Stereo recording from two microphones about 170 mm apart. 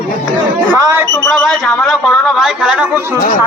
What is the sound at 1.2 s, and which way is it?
A man's voice, centre (ahead or behind).